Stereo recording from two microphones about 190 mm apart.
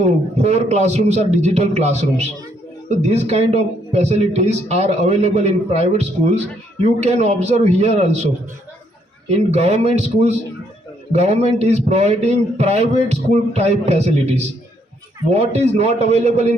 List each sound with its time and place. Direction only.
0.0 s a man's voice: 35° right (ahead or behind)
9.5 s a man's voice: 35° right (ahead or behind)